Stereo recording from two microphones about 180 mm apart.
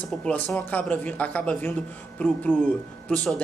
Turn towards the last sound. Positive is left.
turn(degrees=5)  # may be behind; listen again after turning